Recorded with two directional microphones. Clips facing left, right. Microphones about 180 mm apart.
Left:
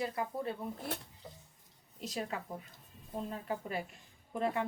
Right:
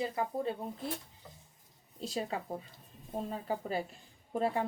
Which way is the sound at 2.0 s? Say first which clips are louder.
Right 3 dB; 30° right (ahead or behind).